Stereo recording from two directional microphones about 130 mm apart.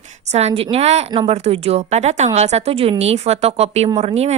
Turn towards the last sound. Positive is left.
turn(degrees=-55)  # may be behind; listen again after turning